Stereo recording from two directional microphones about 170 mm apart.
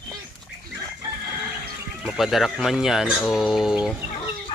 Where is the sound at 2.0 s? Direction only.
Centre (ahead or behind).